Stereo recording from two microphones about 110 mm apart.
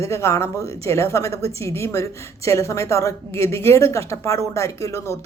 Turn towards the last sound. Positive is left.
turn(degrees=30)  # may be behind; listen again after turning